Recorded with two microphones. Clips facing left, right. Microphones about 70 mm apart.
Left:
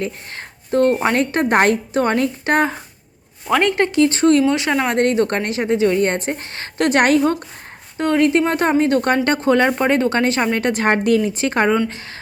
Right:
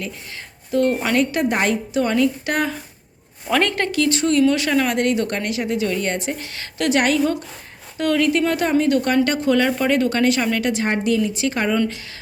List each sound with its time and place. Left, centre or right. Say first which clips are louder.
0.0 s a woman's voice: left 5 dB; left
3.6 s speech: left 5 dB; left
4.4 s speech: even; left
4.9 s a woman's voice: left 4 dB; left
7.9 s a woman's voice: left 3 dB; left
10.7 s a woman's voice: left 4 dB; left
11.2 s a woman's voice: left 3 dB; left